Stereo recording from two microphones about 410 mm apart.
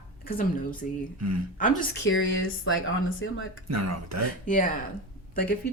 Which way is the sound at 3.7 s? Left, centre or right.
Right.